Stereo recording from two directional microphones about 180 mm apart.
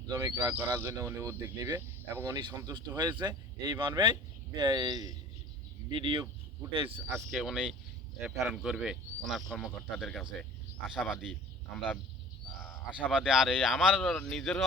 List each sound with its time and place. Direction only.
0.1 s speech: 20° right (ahead or behind)
7.1 s speech: 5° right (ahead or behind)
13.1 s speech: 5° right (ahead or behind)